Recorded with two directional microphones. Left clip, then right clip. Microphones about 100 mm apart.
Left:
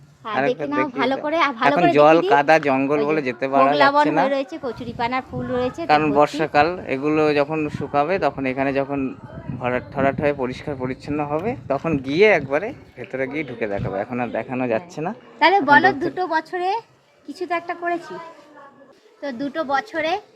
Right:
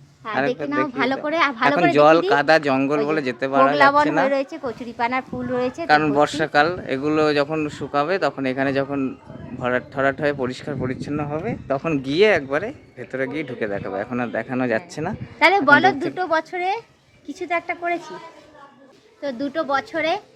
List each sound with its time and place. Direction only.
0.9 s speech: 25° left (ahead or behind)
1.9 s speech: 10° right (ahead or behind)
3.8 s a woman's voice: 30° left (ahead or behind)
5.9 s speech: 5° right (ahead or behind)
11.8 s speech: 5° right (ahead or behind)
19.2 s speech: 30° right (ahead or behind)